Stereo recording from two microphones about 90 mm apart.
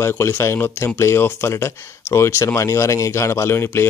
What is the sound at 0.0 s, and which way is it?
Speech, 25° left (ahead or behind).